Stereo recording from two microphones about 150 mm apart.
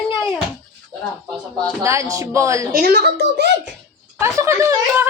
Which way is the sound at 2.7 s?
85° right.